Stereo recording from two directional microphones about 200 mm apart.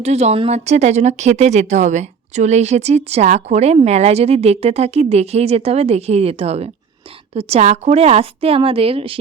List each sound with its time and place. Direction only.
0.0 s a woman's voice: 35° right (ahead or behind)